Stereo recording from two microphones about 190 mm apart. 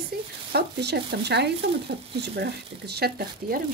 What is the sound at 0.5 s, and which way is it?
Speech, 60° right (ahead or behind).